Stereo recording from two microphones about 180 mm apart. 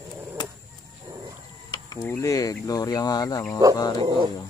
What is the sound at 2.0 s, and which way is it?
Speech, 15° left (ahead or behind).